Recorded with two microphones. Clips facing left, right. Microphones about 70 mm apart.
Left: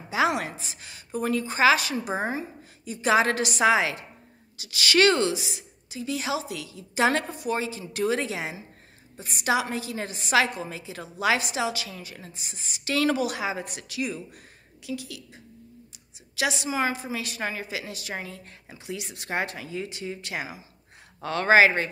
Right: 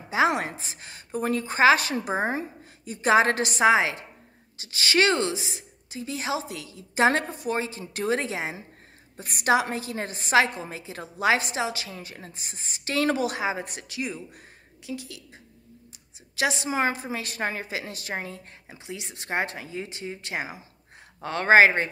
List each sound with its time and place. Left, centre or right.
0.1 s a woman's voice: right
9.1 s a woman's voice: right